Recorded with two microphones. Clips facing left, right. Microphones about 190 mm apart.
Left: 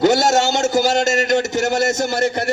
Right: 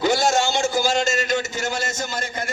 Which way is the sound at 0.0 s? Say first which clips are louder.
Left 5 dB; 70° left (ahead or behind).